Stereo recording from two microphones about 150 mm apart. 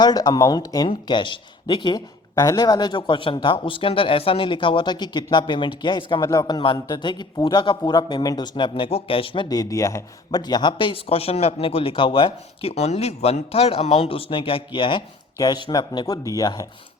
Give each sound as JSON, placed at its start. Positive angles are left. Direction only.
{"t": 0.0, "sound": "speech", "side_deg": 25}